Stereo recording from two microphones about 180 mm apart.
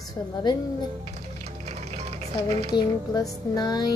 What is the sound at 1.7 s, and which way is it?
Music, 35° right (ahead or behind).